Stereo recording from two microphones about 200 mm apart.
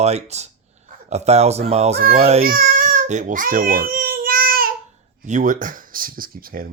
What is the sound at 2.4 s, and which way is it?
Baby cry, 45° right (ahead or behind).